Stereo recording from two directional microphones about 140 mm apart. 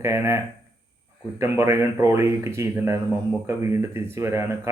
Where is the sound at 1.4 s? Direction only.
20° right (ahead or behind).